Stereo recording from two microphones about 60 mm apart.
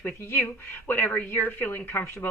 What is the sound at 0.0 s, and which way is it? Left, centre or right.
Speech, left.